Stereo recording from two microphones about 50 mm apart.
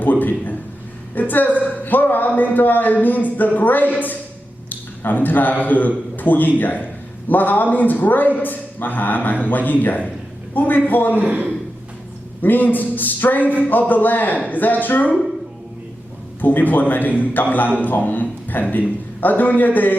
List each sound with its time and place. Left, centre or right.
0.0 s a man's voice: left
11.2 s speech: right
12.4 s a man's voice: left
16.4 s a man's voice: left